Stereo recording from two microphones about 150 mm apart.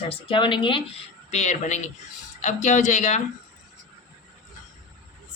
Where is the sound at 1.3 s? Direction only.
50° left (ahead or behind).